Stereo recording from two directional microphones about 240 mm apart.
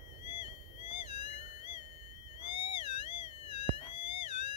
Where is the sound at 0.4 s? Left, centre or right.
Left.